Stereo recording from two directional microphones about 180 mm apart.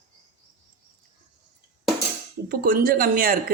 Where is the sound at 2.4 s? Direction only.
50° right (ahead or behind).